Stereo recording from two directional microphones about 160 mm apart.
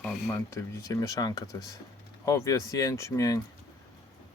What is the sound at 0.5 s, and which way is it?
Speech, 20° left (ahead or behind).